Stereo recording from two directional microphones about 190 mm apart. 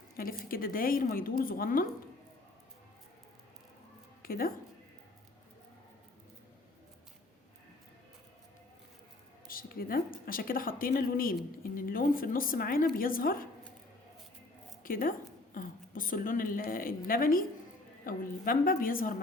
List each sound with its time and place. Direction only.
0.2 s a woman's voice: 50° left (ahead or behind)
4.2 s a woman's voice: 50° left (ahead or behind)
9.5 s a woman's voice: 50° left (ahead or behind)
14.8 s a woman's voice: 50° left (ahead or behind)